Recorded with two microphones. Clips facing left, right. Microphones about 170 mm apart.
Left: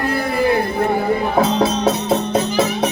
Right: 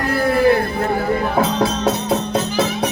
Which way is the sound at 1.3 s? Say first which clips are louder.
Left 2 dB; 5° left (ahead or behind).